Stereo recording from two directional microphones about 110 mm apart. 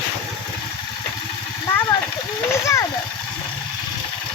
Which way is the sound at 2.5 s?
30° left (ahead or behind).